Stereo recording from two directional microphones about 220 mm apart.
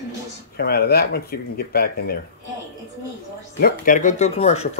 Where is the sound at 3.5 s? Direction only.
40° left (ahead or behind).